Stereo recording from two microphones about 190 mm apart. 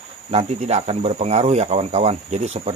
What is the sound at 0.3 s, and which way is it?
Speech, 35° right (ahead or behind).